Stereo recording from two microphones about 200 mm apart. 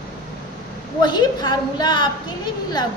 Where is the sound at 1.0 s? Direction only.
20° left (ahead or behind).